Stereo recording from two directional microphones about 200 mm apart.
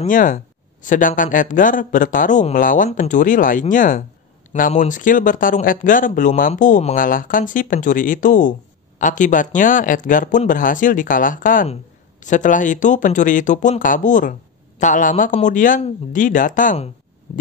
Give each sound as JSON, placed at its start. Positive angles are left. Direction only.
{"t": 0.0, "sound": "speech", "side_deg": 40}